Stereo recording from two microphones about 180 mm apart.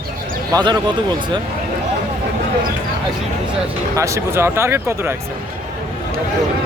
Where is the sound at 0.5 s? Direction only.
25° right (ahead or behind).